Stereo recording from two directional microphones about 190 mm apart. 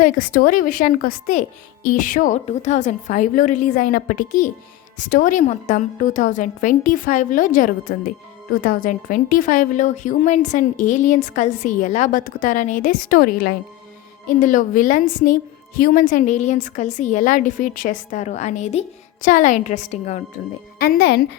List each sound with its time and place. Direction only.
0.0 s a woman's voice: 45° left (ahead or behind)
20.7 s a woman's voice: 50° left (ahead or behind)